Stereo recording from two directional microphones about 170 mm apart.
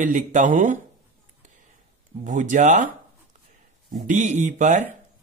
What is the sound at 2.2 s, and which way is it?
Speech, 45° right (ahead or behind).